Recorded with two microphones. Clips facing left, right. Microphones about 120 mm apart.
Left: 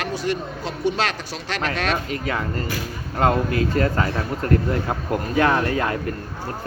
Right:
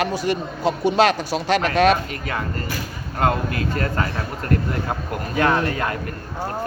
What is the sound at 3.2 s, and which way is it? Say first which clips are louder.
Speech: left 2 dB; 25° left (ahead or behind).